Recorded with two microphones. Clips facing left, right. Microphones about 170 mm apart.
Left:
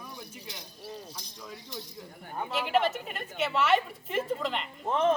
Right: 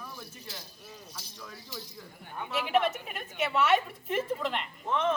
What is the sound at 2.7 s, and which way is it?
A woman's voice, centre (ahead or behind).